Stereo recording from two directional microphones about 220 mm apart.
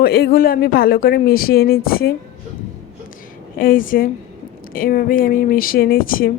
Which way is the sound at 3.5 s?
40° left (ahead or behind).